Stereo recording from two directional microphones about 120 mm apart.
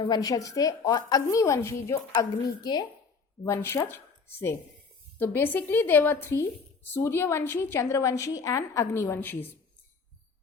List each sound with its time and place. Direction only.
0.0 s a woman's voice: 35° left (ahead or behind)
3.4 s a woman's voice: 25° left (ahead or behind)